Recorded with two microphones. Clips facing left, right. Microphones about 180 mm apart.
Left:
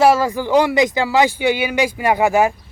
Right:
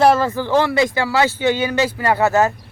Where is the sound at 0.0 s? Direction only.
10° left (ahead or behind).